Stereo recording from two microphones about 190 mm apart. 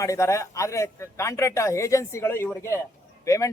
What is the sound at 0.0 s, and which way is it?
A man's voice, 15° left (ahead or behind).